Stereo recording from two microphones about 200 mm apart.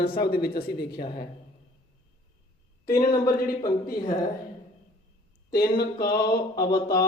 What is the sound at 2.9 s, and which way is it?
Speech, 20° left (ahead or behind).